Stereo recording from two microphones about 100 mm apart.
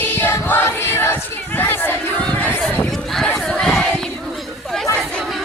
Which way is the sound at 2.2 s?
15° left (ahead or behind).